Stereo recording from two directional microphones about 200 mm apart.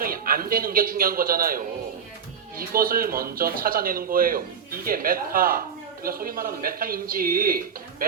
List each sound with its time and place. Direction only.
0.0 s a man's voice: 45° right (ahead or behind)